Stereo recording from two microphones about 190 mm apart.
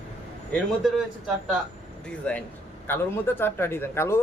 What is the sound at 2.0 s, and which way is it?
Speech, 5° left (ahead or behind).